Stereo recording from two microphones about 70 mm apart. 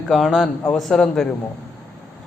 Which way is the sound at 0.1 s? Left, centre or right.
Centre.